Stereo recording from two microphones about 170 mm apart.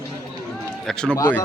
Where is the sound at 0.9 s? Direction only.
5° left (ahead or behind).